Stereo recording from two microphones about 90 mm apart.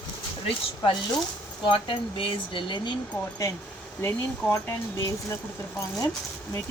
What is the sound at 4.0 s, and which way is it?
Speech, 25° left (ahead or behind).